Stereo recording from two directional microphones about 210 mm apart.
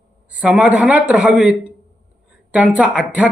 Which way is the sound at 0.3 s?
5° right (ahead or behind).